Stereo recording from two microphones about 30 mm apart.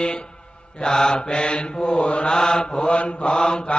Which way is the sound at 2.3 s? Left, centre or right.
Left.